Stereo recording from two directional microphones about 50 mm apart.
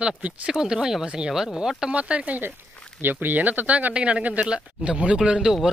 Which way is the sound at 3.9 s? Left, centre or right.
Right.